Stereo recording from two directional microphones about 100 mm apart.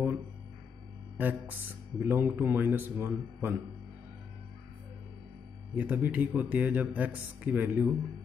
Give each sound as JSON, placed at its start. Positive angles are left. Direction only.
{"t": 1.1, "sound": "speech", "side_deg": -20}
{"t": 5.8, "sound": "speech", "side_deg": -15}